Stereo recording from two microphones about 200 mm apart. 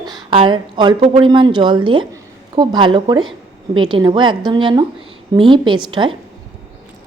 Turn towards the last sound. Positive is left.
turn(degrees=-25)  # may be behind; listen again after turning